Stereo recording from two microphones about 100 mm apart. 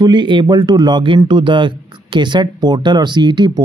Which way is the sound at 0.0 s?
50° right (ahead or behind).